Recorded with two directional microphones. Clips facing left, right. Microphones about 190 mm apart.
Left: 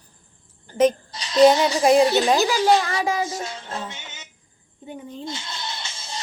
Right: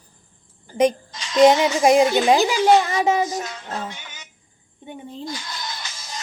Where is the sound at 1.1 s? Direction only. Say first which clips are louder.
Right 1 dB; 35° left (ahead or behind).